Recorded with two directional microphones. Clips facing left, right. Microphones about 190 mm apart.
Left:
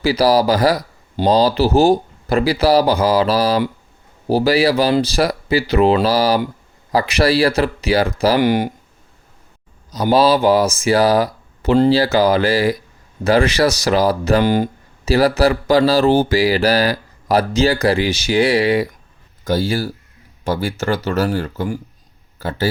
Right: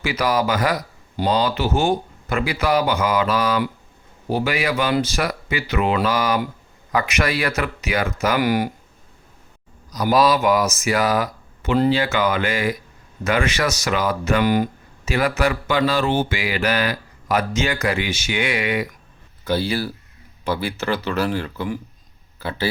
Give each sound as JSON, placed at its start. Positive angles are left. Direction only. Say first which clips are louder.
{"t": 0.0, "sound": "speech", "louder": "left 7 dB", "side_deg": 35}
{"t": 9.9, "sound": "speech", "louder": "left 3 dB", "side_deg": 30}
{"t": 19.5, "sound": "speech", "louder": "left 3 dB", "side_deg": 45}